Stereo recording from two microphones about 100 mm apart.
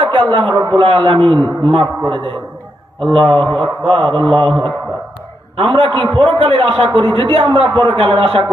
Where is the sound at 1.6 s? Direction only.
65° right (ahead or behind).